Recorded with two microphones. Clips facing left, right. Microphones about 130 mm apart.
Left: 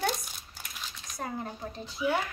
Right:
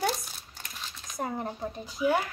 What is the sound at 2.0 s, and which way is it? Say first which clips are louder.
Speech: right 3 dB; 45° right (ahead or behind).